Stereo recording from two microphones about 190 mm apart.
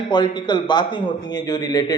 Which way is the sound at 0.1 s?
25° left (ahead or behind).